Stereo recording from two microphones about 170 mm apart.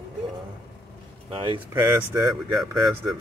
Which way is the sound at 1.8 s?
20° right (ahead or behind).